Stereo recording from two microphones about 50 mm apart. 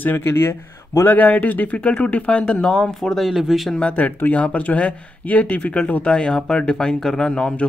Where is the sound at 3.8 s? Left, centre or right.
Left.